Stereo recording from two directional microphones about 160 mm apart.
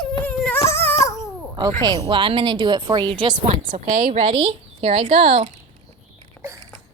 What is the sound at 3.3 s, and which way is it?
Speech, 50° right (ahead or behind).